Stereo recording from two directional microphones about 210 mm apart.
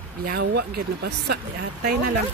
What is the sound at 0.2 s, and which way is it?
Speech, 50° right (ahead or behind).